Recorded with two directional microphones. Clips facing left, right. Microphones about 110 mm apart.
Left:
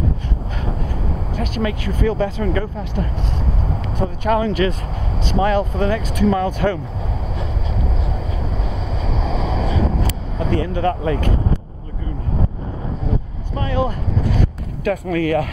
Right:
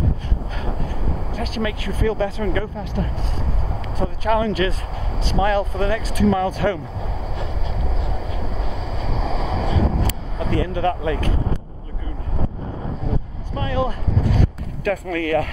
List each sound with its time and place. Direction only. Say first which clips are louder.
1.6 s speech: left 2 dB; 30° left (ahead or behind)
4.3 s speech: left 2 dB; 35° left (ahead or behind)
9.0 s vehicle: left 2 dB; 30° left (ahead or behind)
13.6 s vehicle: left 2 dB; 30° left (ahead or behind)
14.9 s speech: left 2 dB; 25° left (ahead or behind)